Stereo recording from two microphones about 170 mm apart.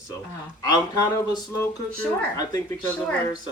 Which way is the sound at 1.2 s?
25° left (ahead or behind).